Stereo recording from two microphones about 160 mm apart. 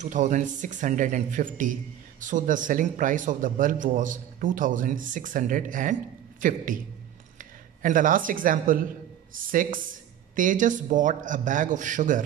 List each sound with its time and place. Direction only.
0.0 s a man's voice: 50° right (ahead or behind)